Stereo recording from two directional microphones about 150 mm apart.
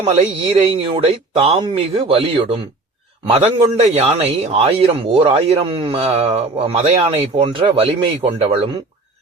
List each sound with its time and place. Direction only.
0.0 s a man's voice: 45° right (ahead or behind)